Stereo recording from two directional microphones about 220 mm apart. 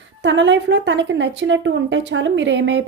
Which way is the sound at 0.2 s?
55° right (ahead or behind).